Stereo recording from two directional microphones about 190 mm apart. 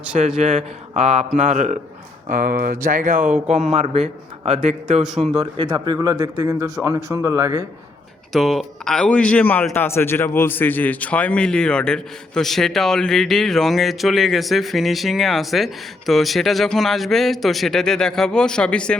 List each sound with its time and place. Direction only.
0.3 s a man's voice: 35° right (ahead or behind)
3.2 s speech: 10° right (ahead or behind)
3.7 s a man's voice: 35° right (ahead or behind)
5.0 s a man's voice: centre (ahead or behind)
5.3 s speech: 30° right (ahead or behind)
8.3 s a man's voice: centre (ahead or behind)